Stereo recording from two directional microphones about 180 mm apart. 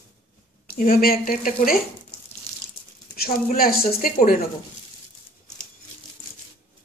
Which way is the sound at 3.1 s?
55° left (ahead or behind).